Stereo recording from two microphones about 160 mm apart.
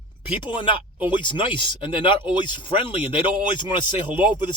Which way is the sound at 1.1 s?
30° left (ahead or behind).